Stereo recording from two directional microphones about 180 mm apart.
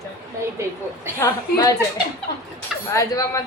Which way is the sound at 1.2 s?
20° left (ahead or behind).